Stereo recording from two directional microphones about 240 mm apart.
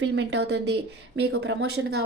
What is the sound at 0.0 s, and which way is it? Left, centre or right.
Speech, right.